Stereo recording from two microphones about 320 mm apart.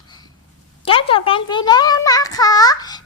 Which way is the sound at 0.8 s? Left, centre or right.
Centre.